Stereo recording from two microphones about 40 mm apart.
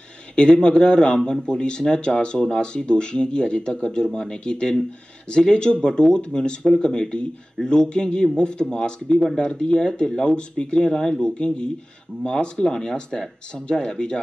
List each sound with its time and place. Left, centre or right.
0.4 s speech: left
9.1 s speech: centre
9.6 s speech: centre